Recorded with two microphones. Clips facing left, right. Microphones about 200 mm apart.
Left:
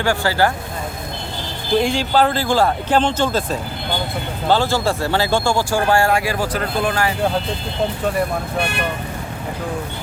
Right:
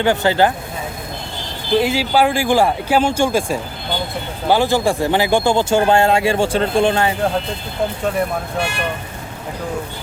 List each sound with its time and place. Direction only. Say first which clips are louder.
0.0 s speech: right 3 dB; 20° right (ahead or behind)
1.8 s speech: right 1 dB; 5° right (ahead or behind); by 7.1 s 25° right (ahead or behind)